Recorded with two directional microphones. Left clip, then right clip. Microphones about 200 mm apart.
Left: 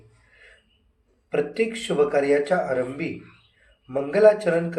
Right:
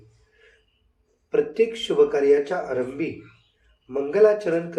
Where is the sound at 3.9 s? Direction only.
35° right (ahead or behind).